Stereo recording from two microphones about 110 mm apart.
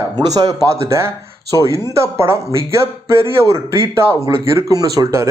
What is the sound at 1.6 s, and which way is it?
Speech, 25° right (ahead or behind).